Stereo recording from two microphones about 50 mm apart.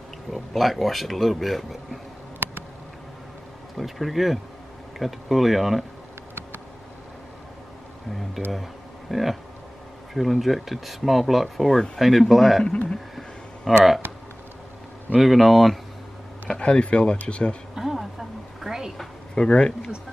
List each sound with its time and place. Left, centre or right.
0.3 s speech: centre
3.7 s speech: centre
9.1 s speech: centre
13.7 s speech: centre
15.1 s speech: centre
16.5 s speech: left
17.7 s a sound: centre
18.9 s a sound: centre